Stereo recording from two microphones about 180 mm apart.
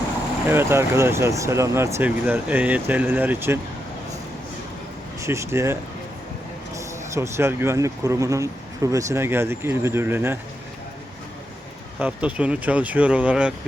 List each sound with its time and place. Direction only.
0.4 s speech: 15° right (ahead or behind)
5.2 s speech: 15° right (ahead or behind)
6.7 s speech: 15° right (ahead or behind)
11.9 s speech: 10° right (ahead or behind)